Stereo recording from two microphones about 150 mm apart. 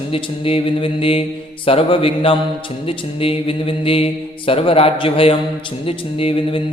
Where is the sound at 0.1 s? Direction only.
40° left (ahead or behind).